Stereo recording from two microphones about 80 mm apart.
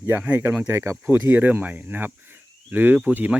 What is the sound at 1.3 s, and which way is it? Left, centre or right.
Speech, right.